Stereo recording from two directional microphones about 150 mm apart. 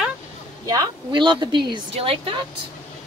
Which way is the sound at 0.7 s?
30° right (ahead or behind).